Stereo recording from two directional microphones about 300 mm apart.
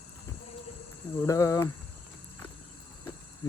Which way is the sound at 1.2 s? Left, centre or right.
Centre.